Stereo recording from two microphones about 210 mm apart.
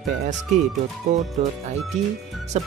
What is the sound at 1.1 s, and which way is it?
Speech, 35° right (ahead or behind).